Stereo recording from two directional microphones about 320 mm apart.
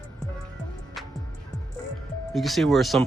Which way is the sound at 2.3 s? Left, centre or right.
Centre.